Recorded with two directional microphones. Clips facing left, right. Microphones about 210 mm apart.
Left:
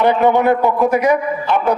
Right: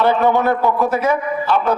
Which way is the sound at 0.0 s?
15° left (ahead or behind).